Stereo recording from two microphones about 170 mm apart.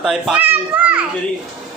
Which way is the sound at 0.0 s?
5° right (ahead or behind).